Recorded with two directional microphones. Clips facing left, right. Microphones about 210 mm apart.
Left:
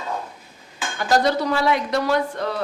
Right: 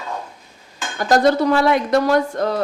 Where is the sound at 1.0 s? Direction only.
45° right (ahead or behind).